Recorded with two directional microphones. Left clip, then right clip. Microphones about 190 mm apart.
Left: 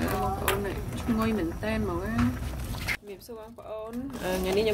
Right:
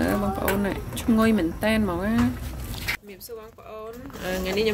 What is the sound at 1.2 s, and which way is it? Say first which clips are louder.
Speech: right 7 dB; 50° right (ahead or behind).